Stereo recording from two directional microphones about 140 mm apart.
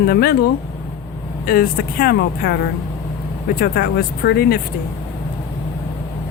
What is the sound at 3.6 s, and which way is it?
Speech, 90° left.